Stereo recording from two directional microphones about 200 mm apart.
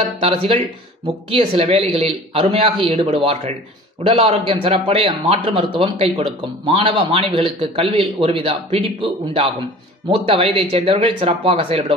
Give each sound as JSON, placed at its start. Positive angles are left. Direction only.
{"t": 0.2, "sound": "a man's voice", "side_deg": -30}